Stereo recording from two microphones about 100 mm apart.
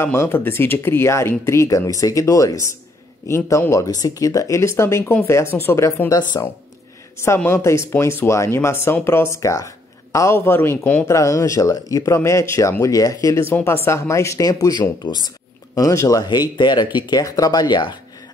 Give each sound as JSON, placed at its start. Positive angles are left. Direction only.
{"t": 0.0, "sound": "speech", "side_deg": 25}
{"t": 7.3, "sound": "speech", "side_deg": 25}